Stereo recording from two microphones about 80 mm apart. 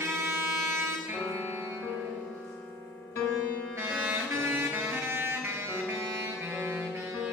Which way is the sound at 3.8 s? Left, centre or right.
Right.